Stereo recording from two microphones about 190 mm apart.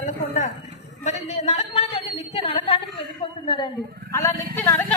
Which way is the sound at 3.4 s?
25° left (ahead or behind).